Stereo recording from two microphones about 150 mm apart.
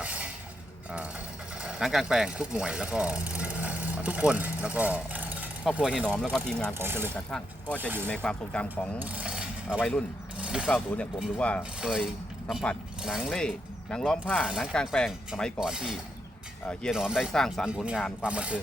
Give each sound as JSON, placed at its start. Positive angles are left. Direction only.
{"t": 1.6, "sound": "speech", "side_deg": 0}
{"t": 6.3, "sound": "speech", "side_deg": 5}
{"t": 6.7, "sound": "speech", "side_deg": -15}
{"t": 7.3, "sound": "speech", "side_deg": 5}
{"t": 7.8, "sound": "speech", "side_deg": -10}
{"t": 8.0, "sound": "speech", "side_deg": 5}
{"t": 9.0, "sound": "mechanisms", "side_deg": -10}
{"t": 10.7, "sound": "speech", "side_deg": 5}
{"t": 11.8, "sound": "speech", "side_deg": -5}
{"t": 13.9, "sound": "speech", "side_deg": 5}